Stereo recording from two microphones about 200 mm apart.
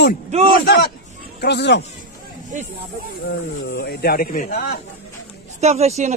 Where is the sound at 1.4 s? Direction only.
60° left (ahead or behind).